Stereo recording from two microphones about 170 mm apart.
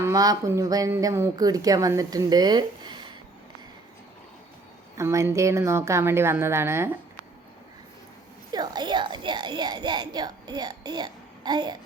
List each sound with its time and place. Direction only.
0.0 s speech: 20° right (ahead or behind)
4.9 s speech: 15° right (ahead or behind)
8.5 s a child's voice: 25° right (ahead or behind)